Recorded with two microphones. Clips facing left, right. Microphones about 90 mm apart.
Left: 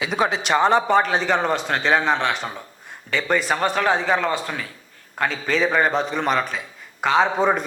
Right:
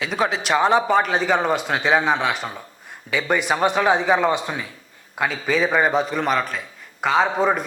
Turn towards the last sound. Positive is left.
turn(degrees=0)  # may be behind; listen again after turning